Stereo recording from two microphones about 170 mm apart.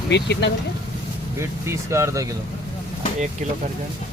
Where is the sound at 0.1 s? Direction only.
85° left.